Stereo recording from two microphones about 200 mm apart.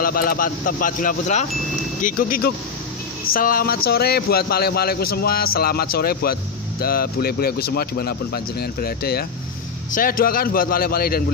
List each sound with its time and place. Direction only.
0.0 s a man's voice: 45° left (ahead or behind)